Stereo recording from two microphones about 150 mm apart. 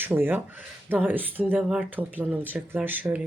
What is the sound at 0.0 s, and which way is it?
Speech, 15° right (ahead or behind).